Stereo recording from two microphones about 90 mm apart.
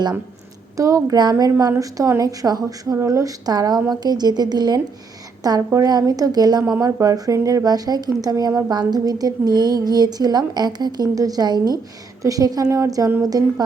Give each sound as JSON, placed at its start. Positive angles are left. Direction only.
{"t": 0.8, "sound": "a woman's voice", "side_deg": -40}